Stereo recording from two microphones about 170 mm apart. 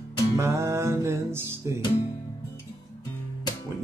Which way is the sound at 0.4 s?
15° right (ahead or behind).